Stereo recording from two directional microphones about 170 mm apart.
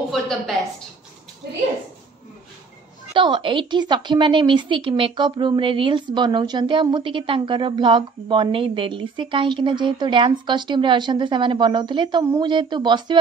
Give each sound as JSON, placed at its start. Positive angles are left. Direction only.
{"t": 3.2, "sound": "a woman's voice", "side_deg": -30}